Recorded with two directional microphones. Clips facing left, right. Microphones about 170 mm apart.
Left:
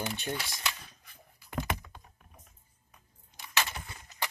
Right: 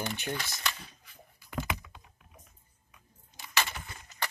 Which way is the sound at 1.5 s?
45° left (ahead or behind).